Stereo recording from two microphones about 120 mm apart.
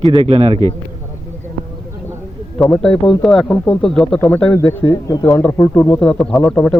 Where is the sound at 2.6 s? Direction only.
5° left (ahead or behind).